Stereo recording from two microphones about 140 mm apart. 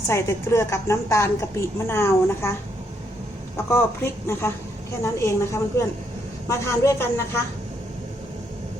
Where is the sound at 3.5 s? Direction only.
20° left (ahead or behind).